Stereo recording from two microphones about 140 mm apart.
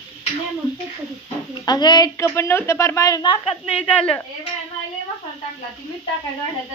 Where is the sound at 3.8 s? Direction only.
10° left (ahead or behind).